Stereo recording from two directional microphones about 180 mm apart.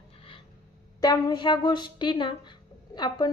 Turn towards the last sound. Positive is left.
turn(degrees=25)  # may be behind; listen again after turning